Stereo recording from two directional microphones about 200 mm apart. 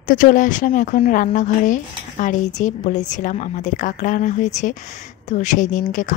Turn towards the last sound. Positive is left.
turn(degrees=40)  # may be behind; listen again after turning